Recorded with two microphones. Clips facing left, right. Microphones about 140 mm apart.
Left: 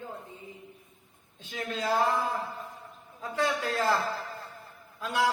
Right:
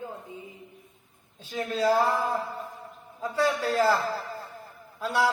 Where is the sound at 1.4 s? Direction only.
35° right (ahead or behind).